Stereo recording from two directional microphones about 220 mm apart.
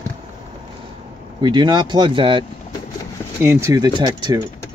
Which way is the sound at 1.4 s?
20° right (ahead or behind).